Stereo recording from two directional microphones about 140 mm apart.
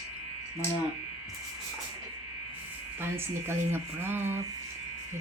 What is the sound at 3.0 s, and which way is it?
Speech, 15° right (ahead or behind).